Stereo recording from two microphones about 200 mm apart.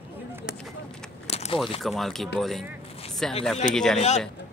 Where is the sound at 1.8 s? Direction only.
Centre (ahead or behind).